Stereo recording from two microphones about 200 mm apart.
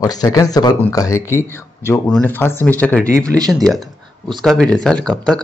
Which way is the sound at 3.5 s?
Centre (ahead or behind).